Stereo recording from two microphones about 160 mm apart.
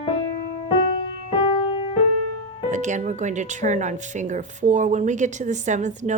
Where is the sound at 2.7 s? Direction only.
50° right (ahead or behind).